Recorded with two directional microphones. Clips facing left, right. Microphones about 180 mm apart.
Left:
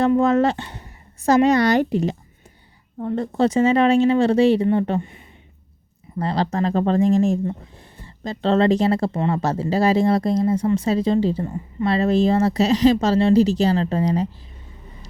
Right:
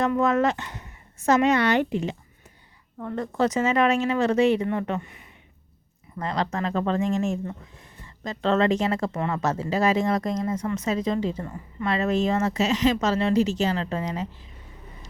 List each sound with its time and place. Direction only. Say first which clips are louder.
0.0 s speech: left 5 dB; 30° left (ahead or behind)
3.0 s speech: left 5 dB; 25° left (ahead or behind)